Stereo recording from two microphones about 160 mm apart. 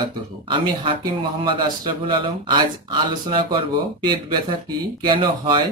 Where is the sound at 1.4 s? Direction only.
30° right (ahead or behind).